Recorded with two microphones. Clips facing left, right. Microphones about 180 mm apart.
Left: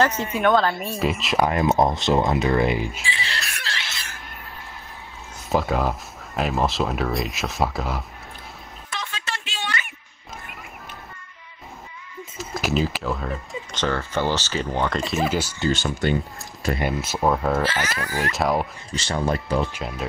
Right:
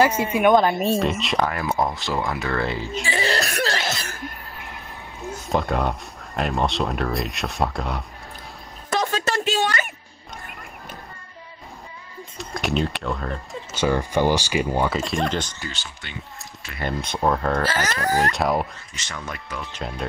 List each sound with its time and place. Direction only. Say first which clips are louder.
0.0 s a woman's voice: right 3 dB; 10° right (ahead or behind)
0.9 s speech: right 2 dB; 5° left (ahead or behind)
1.4 s speech: left 5 dB; 20° left (ahead or behind)
3.0 s cough: right 8 dB; 45° right (ahead or behind)
5.5 s speech: left 1 dB; centre (ahead or behind)
8.9 s a sound: right 10 dB; 40° right (ahead or behind)
12.4 s speech: left 1 dB; centre (ahead or behind)
15.7 s speech: left 17 dB; 45° left (ahead or behind)
16.8 s speech: right 1 dB; 5° left (ahead or behind)
17.6 s speech: right 3 dB; 40° right (ahead or behind)
18.3 s speech: even; centre (ahead or behind)
18.9 s speech: left 11 dB; 30° left (ahead or behind)